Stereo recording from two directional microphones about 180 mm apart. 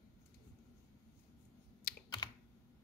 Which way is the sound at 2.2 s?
20° left (ahead or behind).